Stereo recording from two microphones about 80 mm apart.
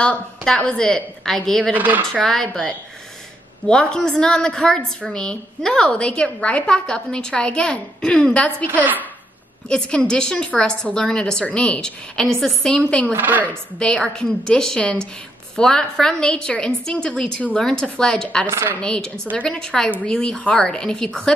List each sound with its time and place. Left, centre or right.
0.5 s a woman's voice: centre
1.6 s speech: right
2.2 s a woman's voice: centre
9.7 s a woman's voice: centre
13.1 s speech: right
13.7 s a woman's voice: centre
18.5 s speech: right
18.8 s a woman's voice: centre